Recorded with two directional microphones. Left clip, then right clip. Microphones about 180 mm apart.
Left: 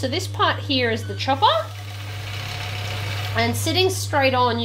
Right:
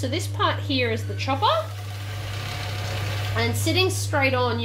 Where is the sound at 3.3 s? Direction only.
35° left (ahead or behind).